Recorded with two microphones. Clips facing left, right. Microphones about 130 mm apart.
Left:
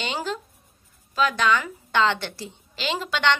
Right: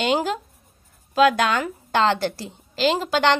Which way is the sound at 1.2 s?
50° right (ahead or behind).